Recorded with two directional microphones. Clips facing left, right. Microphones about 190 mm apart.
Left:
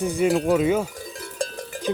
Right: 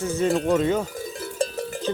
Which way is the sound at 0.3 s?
5° left (ahead or behind).